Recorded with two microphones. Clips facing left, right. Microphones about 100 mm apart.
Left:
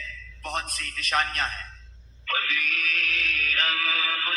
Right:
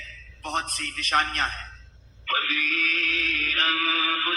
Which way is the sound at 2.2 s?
40° right (ahead or behind).